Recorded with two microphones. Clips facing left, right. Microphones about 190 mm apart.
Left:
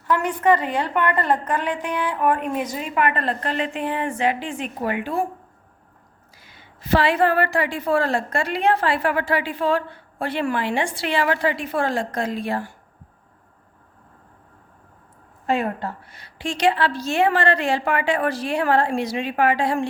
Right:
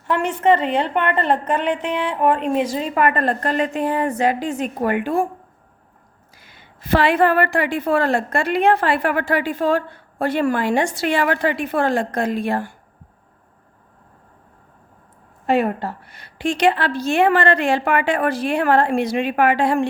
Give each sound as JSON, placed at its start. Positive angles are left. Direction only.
{"t": 0.1, "sound": "a woman's voice", "side_deg": -25}
{"t": 6.3, "sound": "a woman's voice", "side_deg": -55}
{"t": 16.0, "sound": "a woman's voice", "side_deg": -55}